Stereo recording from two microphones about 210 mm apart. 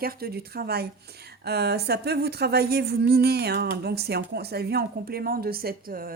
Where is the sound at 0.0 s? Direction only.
45° right (ahead or behind).